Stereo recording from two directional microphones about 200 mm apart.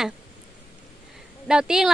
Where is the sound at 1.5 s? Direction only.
5° right (ahead or behind).